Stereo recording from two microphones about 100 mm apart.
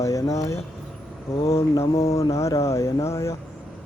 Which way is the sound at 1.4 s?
75° left (ahead or behind).